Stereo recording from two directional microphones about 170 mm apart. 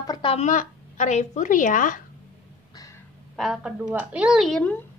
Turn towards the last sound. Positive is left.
turn(degrees=5)  # may be behind; listen again after turning